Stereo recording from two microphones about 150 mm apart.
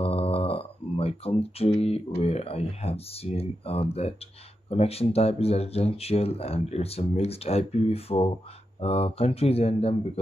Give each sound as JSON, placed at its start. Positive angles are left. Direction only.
{"t": 0.0, "sound": "speech", "side_deg": 40}